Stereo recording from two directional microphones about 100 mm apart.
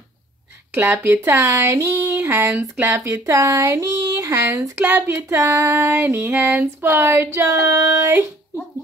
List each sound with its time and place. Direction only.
0.7 s speech: 30° right (ahead or behind)